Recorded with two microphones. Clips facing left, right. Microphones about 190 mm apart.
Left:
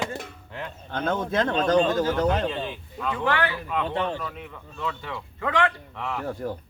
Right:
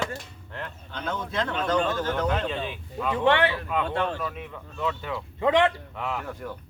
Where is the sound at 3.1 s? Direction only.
25° right (ahead or behind).